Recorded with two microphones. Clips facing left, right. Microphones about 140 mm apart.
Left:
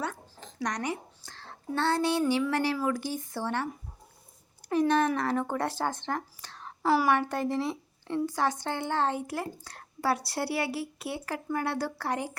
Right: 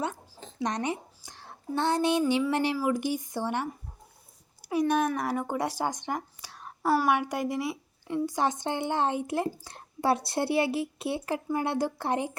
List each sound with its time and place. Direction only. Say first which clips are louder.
0.0 s a sound: right 2 dB; 20° right (ahead or behind)
2.5 s a woman's voice: right 1 dB; 20° right (ahead or behind)
6.9 s a woman's voice: even; centre (ahead or behind)
7.2 s a woman's voice: left 1 dB; 10° right (ahead or behind)